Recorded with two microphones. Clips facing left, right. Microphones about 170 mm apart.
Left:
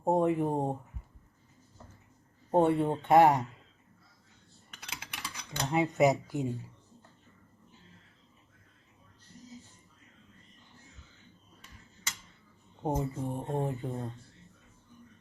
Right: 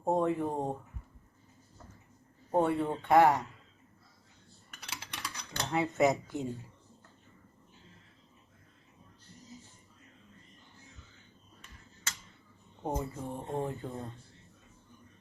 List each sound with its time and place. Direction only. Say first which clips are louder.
0.0 s speech: left 3 dB; 20° left (ahead or behind)
2.5 s speech: left 3 dB; 20° left (ahead or behind)
5.5 s speech: left 2 dB; 20° left (ahead or behind)
12.8 s speech: left 3 dB; 15° left (ahead or behind)